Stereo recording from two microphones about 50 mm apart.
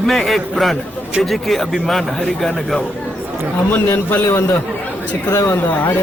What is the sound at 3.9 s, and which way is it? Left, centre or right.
Speech, left.